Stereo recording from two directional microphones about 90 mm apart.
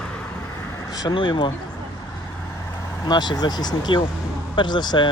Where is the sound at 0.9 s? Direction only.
45° left (ahead or behind).